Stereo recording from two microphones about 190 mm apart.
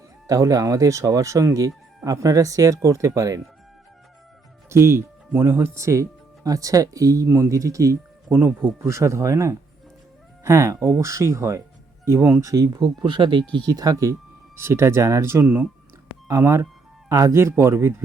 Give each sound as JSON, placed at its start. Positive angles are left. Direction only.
{"t": 0.3, "sound": "speech", "side_deg": -20}
{"t": 4.7, "sound": "speech", "side_deg": -15}